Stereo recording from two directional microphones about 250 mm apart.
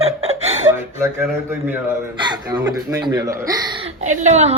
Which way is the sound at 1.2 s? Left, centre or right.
Centre.